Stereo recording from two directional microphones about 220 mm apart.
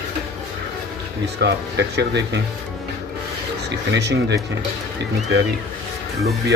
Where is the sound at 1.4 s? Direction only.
50° right (ahead or behind).